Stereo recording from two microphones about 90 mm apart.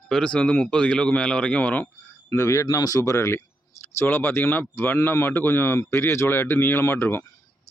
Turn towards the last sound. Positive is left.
turn(degrees=25)  # may be behind; listen again after turning